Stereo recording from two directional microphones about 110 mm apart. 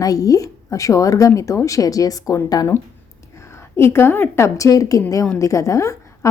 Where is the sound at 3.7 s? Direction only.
25° left (ahead or behind).